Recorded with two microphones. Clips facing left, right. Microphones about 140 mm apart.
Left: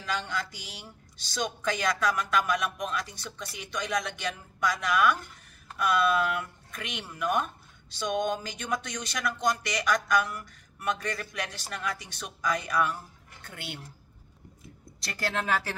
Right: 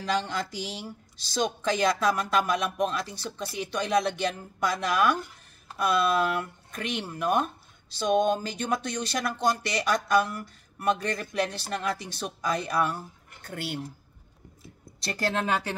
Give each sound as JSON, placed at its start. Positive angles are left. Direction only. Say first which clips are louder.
{"t": 0.0, "sound": "speech", "louder": "right 4 dB", "side_deg": -35}
{"t": 15.0, "sound": "a woman's voice", "louder": "right 4 dB", "side_deg": -25}